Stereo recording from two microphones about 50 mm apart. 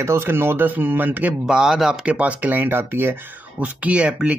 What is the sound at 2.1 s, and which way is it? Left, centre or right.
Speech, right.